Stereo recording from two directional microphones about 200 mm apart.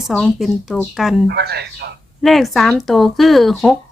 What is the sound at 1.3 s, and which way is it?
Speech, 55° right (ahead or behind).